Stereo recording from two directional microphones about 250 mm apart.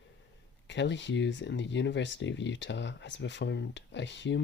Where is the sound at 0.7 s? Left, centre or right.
Left.